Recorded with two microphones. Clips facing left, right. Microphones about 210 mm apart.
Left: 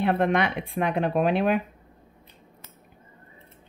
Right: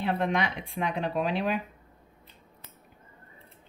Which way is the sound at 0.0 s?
60° left (ahead or behind).